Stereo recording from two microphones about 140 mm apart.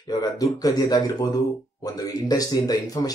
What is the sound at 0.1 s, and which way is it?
Speech, 30° left (ahead or behind).